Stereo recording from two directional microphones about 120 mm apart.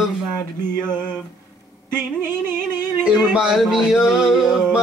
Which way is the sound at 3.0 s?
5° right (ahead or behind).